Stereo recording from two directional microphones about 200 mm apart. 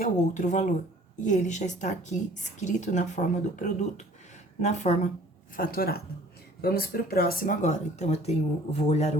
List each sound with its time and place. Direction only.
0.0 s a woman's voice: 40° left (ahead or behind)
5.5 s a woman's voice: 45° left (ahead or behind)